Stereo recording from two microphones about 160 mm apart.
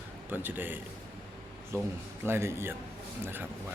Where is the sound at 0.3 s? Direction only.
10° right (ahead or behind).